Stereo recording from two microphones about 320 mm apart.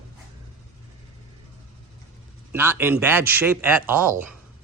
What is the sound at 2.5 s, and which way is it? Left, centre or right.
Speech, centre.